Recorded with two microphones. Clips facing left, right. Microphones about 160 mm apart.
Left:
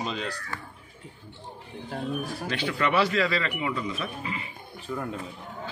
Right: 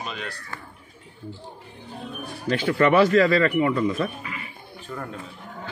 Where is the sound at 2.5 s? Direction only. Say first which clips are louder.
Right 8 dB; 45° right (ahead or behind).